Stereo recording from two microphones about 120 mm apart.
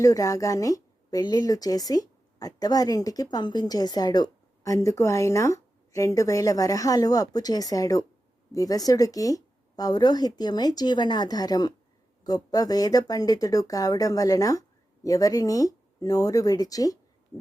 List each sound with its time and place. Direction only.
0.0 s speech: 30° left (ahead or behind)